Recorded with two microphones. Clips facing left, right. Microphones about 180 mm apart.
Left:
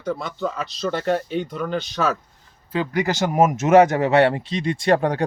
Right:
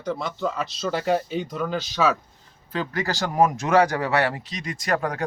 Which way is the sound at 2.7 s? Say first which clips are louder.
Left 5 dB; 15° left (ahead or behind).